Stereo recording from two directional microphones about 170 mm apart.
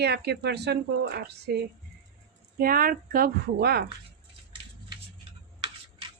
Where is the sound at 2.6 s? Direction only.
60° right (ahead or behind).